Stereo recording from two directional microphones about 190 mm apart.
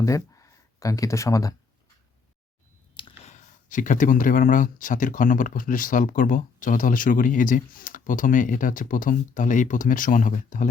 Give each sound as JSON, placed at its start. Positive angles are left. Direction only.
{"t": 0.0, "sound": "speech", "side_deg": 15}
{"t": 2.9, "sound": "clicking", "side_deg": 25}
{"t": 3.3, "sound": "speech", "side_deg": 40}